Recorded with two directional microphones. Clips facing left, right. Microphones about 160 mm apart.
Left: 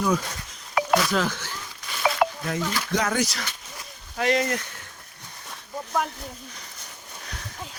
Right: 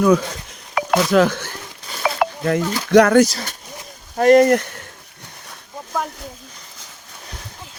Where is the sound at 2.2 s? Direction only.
70° right (ahead or behind).